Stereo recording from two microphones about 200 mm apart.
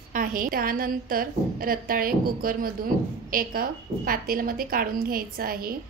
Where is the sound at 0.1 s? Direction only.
45° right (ahead or behind).